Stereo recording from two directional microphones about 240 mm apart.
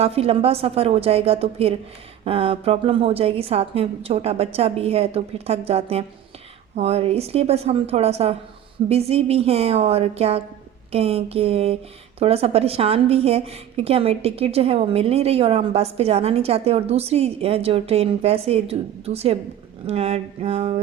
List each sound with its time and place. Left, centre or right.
0.0 s a woman's voice: right